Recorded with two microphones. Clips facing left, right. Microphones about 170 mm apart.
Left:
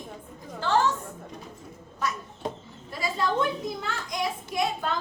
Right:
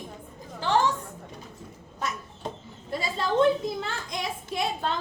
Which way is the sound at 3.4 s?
25° right (ahead or behind).